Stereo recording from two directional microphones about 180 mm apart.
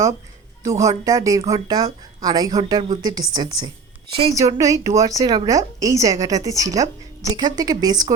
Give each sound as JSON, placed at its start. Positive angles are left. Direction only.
{"t": 0.6, "sound": "speech", "side_deg": -20}